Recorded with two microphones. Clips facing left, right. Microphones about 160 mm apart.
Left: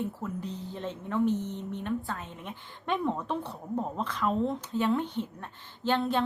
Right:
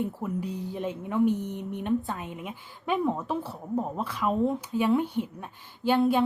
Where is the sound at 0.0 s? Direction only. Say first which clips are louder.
Right 4 dB; 10° right (ahead or behind).